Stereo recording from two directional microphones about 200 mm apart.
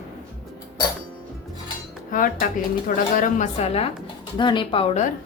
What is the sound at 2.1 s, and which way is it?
Speech, 45° left (ahead or behind).